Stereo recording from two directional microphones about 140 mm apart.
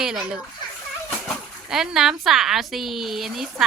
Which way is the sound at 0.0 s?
5° right (ahead or behind).